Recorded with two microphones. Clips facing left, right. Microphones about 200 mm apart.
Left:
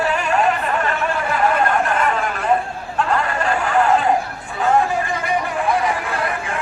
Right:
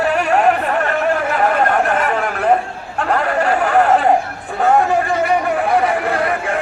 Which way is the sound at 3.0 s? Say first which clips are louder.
Right 6 dB; 60° right (ahead or behind).